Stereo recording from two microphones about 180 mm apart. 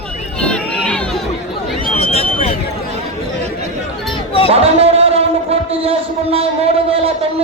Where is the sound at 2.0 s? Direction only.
35° left (ahead or behind).